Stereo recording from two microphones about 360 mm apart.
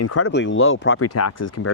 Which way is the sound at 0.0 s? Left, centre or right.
Left.